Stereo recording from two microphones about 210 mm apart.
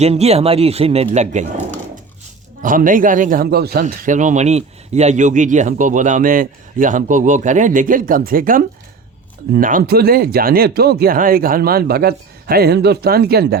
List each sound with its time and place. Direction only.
0.0 s speech: 30° right (ahead or behind)
2.6 s speech: 40° right (ahead or behind)
3.8 s speech: 35° right (ahead or behind)